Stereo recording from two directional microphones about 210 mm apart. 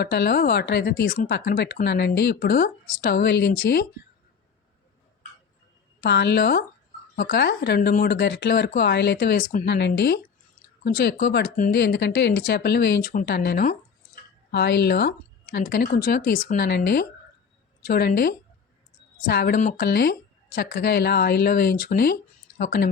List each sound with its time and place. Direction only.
0.0 s speech: 50° left (ahead or behind)
6.0 s speech: 55° left (ahead or behind)
9.6 s speech: 55° left (ahead or behind)